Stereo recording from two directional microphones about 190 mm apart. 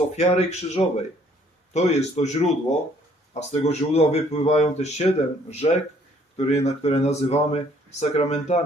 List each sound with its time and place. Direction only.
0.2 s speech: 35° left (ahead or behind)